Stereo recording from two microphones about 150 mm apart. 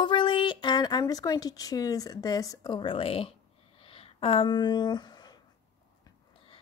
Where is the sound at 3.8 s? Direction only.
40° left (ahead or behind).